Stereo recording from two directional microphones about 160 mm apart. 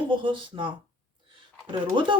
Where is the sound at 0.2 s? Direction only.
30° right (ahead or behind).